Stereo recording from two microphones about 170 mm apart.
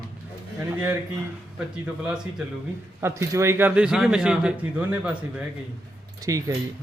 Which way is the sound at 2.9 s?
15° right (ahead or behind).